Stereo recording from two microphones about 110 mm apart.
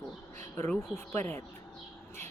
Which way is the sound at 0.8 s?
20° left (ahead or behind).